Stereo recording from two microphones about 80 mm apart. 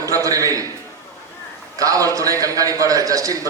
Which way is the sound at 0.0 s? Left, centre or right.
Right.